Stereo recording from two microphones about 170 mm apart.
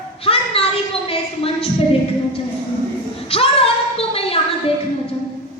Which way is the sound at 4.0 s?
35° left (ahead or behind).